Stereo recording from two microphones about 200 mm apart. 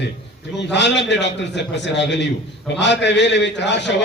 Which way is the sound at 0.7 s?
60° left (ahead or behind).